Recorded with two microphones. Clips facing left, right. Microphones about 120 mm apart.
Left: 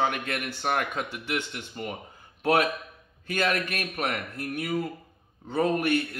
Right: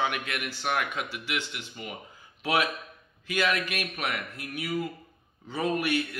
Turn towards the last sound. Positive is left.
turn(degrees=50)  # may be behind; listen again after turning